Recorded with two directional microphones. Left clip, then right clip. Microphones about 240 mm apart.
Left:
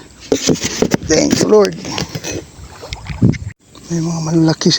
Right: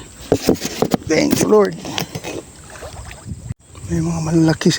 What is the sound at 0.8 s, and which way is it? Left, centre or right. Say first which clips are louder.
Speech: left 5 dB; centre.